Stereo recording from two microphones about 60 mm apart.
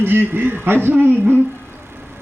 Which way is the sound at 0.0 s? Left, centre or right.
Right.